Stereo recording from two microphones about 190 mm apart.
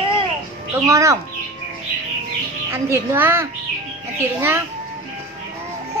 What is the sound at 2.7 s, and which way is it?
A woman's voice, 10° right (ahead or behind).